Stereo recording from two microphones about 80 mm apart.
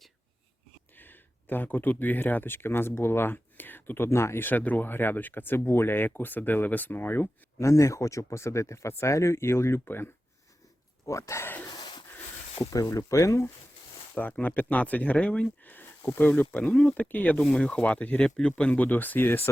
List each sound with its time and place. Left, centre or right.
0.9 s speech: left
7.6 s speech: left
11.0 s speech: left
11.7 s wheeze: left
12.7 s speech: left
14.4 s speech: left